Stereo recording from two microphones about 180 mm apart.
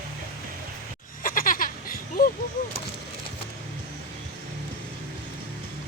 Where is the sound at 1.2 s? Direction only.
50° left (ahead or behind).